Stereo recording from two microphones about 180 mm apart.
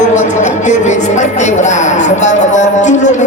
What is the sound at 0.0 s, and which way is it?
Speech, 40° left (ahead or behind).